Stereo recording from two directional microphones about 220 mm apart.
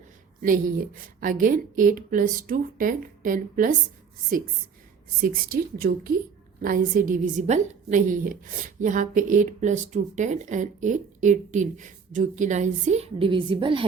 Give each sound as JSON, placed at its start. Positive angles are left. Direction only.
{"t": 1.2, "sound": "a woman's voice", "side_deg": -35}
{"t": 5.2, "sound": "a woman's voice", "side_deg": -40}